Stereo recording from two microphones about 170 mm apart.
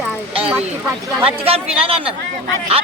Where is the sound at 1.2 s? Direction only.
35° right (ahead or behind).